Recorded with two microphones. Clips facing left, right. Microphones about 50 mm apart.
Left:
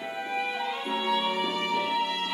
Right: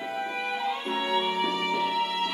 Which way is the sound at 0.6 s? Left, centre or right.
Centre.